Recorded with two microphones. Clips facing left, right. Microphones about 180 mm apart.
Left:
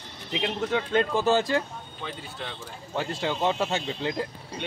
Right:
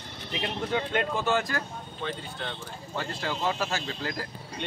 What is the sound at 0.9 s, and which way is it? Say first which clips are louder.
Speech: left 7 dB; 30° left (ahead or behind).